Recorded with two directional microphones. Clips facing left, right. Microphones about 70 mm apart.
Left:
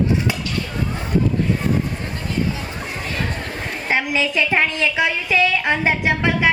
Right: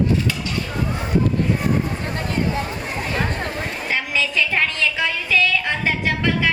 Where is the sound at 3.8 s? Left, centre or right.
Left.